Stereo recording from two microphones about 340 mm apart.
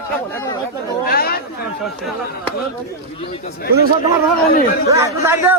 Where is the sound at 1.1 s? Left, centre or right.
Left.